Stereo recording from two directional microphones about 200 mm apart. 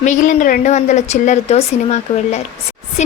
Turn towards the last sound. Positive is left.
turn(degrees=35)  # may be behind; listen again after turning